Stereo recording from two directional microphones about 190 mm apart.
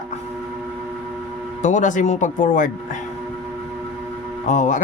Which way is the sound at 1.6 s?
40° left (ahead or behind).